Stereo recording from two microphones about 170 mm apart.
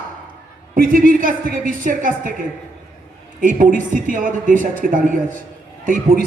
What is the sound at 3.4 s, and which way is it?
A man's voice, 50° right (ahead or behind).